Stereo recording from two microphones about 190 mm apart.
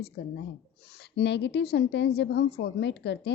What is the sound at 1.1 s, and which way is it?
A woman's voice, 65° left (ahead or behind).